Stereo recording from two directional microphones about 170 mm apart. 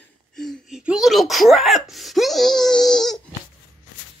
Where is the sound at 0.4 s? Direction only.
Centre (ahead or behind).